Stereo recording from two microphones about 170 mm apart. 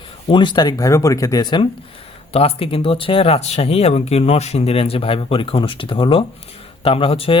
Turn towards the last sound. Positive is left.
turn(degrees=35)  # may be behind; listen again after turning